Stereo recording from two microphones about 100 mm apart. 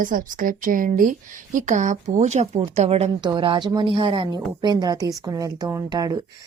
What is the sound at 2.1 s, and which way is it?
A woman's voice, 90° right.